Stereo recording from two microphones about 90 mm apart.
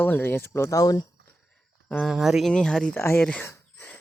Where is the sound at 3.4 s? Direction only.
20° left (ahead or behind).